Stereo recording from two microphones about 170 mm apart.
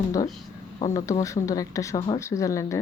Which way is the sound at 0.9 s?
20° left (ahead or behind).